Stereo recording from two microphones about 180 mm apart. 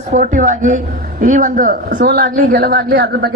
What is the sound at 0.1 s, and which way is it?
A woman's voice, 45° right (ahead or behind).